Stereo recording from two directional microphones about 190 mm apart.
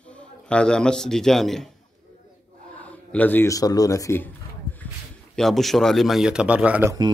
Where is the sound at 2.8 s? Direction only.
10° left (ahead or behind).